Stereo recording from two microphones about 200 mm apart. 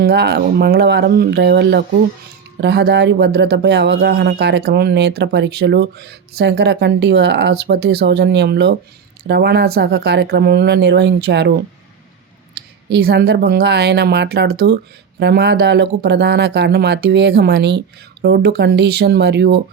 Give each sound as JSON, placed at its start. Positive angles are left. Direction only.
{"t": 0.0, "sound": "speech", "side_deg": -55}
{"t": 12.5, "sound": "speech", "side_deg": -55}